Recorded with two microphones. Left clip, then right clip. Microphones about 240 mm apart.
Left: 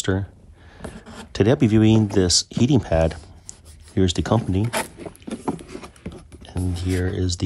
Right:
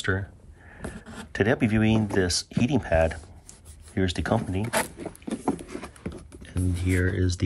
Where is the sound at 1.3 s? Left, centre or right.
Left.